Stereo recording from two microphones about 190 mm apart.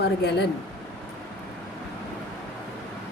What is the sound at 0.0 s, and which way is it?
Speech, 60° left (ahead or behind).